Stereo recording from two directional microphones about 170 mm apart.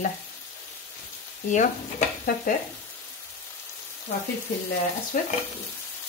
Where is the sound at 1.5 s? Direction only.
45° left (ahead or behind).